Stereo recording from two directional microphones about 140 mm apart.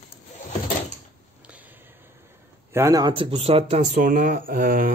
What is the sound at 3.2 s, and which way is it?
Speech, 45° right (ahead or behind).